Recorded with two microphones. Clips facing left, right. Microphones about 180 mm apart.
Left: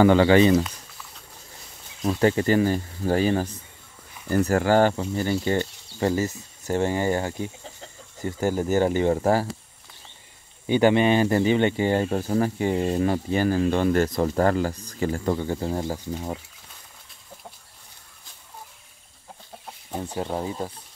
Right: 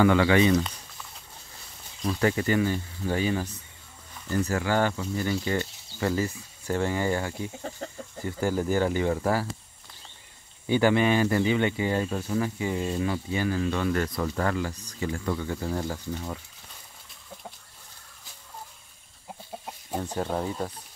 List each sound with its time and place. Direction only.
0.0 s speech: 30° left (ahead or behind)
2.0 s speech: 25° left (ahead or behind)
4.3 s speech: 55° left (ahead or behind); by 7.2 s 25° left (ahead or behind)
7.8 s a sound: 55° right (ahead or behind)
8.4 s speech: 20° left (ahead or behind)
10.7 s speech: 20° left (ahead or behind)
20.0 s speech: 10° left (ahead or behind)